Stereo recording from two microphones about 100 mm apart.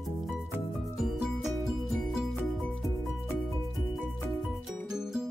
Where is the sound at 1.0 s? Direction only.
Centre (ahead or behind).